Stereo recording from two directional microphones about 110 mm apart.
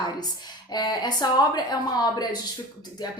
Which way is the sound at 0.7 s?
40° left (ahead or behind).